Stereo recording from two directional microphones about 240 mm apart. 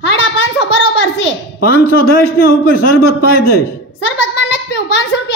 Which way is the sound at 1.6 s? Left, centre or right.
Left.